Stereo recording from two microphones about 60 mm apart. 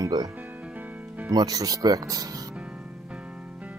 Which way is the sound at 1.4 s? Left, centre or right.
Right.